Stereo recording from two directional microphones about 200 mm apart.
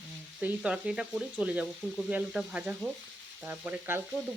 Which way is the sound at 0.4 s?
5° right (ahead or behind).